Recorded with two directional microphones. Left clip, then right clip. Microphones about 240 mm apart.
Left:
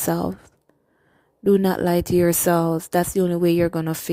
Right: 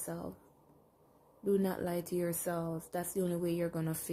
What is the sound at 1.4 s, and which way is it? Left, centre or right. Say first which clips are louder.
Speech: left 14 dB; left.